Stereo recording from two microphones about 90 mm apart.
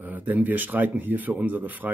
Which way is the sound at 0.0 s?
20° right (ahead or behind).